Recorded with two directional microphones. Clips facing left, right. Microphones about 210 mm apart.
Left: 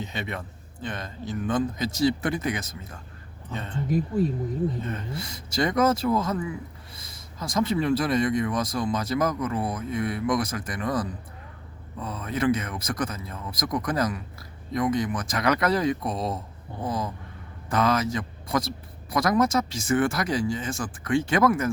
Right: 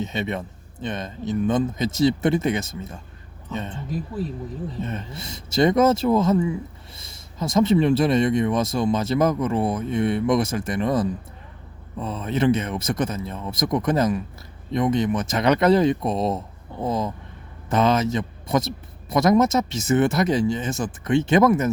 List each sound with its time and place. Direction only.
0.0 s speech: 20° right (ahead or behind)
4.8 s speech: 25° right (ahead or behind)